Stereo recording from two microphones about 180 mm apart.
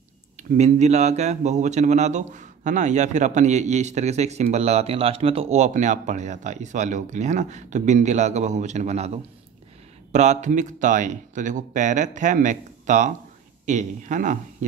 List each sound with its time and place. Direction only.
0.4 s speech: 45° right (ahead or behind)